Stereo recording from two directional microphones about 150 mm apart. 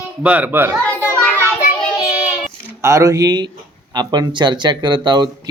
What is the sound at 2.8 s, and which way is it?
Speech, 20° right (ahead or behind).